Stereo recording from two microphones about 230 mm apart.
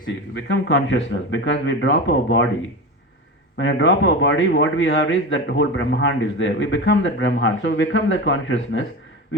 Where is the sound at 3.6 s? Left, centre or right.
Left.